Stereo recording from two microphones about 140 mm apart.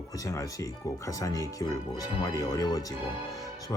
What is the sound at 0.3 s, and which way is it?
Speech, 20° left (ahead or behind).